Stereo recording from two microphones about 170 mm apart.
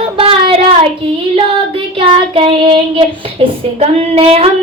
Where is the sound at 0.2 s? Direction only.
30° right (ahead or behind).